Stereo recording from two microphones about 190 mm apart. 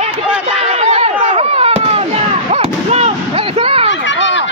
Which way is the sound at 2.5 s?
35° right (ahead or behind).